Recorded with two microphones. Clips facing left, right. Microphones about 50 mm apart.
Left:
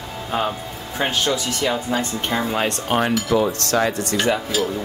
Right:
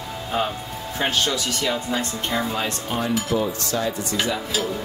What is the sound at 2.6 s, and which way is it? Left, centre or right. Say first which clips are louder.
Speech: left 5 dB; left.